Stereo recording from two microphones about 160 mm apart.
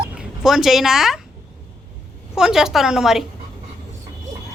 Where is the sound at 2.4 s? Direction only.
5° right (ahead or behind).